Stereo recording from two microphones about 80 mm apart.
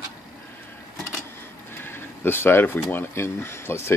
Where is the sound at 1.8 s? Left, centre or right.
Left.